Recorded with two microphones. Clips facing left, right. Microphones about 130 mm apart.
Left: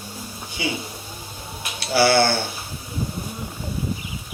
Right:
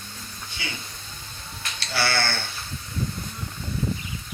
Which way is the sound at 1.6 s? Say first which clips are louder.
Left 9 dB; 10° left (ahead or behind).